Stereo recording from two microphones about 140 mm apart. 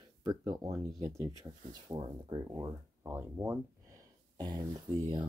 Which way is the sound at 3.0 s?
15° right (ahead or behind).